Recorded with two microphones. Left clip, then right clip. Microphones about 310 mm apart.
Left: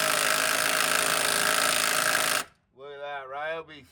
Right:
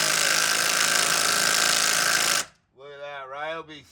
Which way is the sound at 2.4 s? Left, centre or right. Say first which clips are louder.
Right 3 dB; centre.